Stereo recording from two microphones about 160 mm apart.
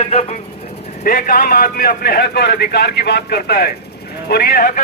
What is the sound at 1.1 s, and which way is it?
A man's voice, 60° left (ahead or behind).